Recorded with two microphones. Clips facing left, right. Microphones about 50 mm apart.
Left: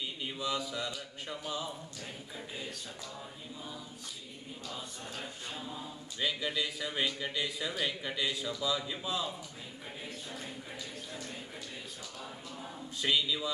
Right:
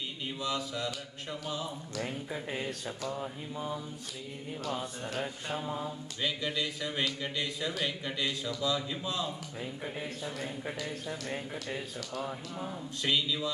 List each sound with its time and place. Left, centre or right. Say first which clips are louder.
0.2 s speech: right 1 dB; centre
4.6 s mantra: right 7 dB; right
6.2 s speech: right 1 dB; centre
11.1 s mantra: right 7 dB; right
13.0 s speech: even; centre